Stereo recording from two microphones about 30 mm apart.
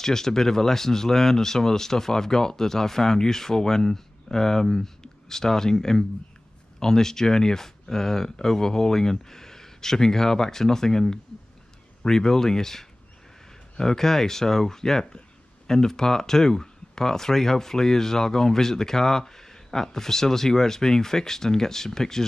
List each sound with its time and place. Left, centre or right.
0.0 s speech: centre